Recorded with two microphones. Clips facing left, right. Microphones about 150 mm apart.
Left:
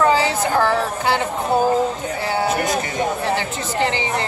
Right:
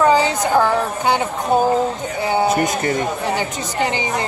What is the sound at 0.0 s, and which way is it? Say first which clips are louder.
Speech: right 2 dB; 20° right (ahead or behind).